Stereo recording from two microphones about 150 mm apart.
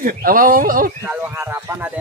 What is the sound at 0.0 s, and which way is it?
Speech, 70° right (ahead or behind).